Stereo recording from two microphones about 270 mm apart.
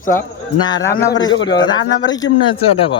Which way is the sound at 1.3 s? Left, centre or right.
Left.